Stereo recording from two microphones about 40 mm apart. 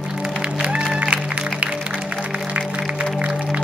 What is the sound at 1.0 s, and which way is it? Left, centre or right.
Music, right.